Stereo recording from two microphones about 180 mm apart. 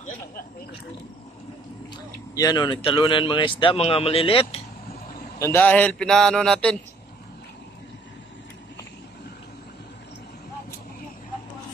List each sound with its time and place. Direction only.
2.3 s a man's voice: 20° left (ahead or behind)
5.4 s a man's voice: 10° left (ahead or behind)